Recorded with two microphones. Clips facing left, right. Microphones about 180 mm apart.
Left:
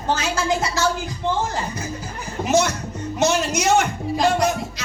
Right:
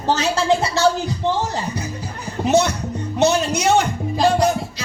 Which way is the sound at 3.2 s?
35° right (ahead or behind).